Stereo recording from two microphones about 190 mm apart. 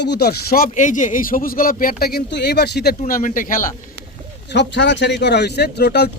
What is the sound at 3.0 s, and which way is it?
Speech, 45° left (ahead or behind).